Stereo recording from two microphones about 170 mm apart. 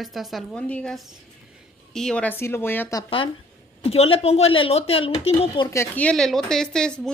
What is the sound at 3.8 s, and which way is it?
Speech, 35° left (ahead or behind).